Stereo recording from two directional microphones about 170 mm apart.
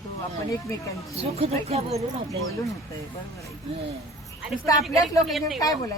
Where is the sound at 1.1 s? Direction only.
35° right (ahead or behind).